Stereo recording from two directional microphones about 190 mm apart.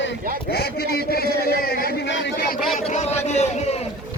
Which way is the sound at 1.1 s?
55° left (ahead or behind).